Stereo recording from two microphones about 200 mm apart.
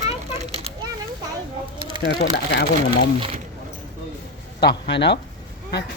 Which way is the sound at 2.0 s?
55° left (ahead or behind).